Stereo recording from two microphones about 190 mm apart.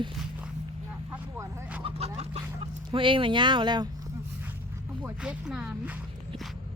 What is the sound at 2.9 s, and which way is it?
Speech, 25° right (ahead or behind).